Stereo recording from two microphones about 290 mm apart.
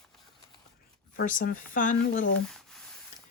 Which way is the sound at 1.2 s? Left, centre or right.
Left.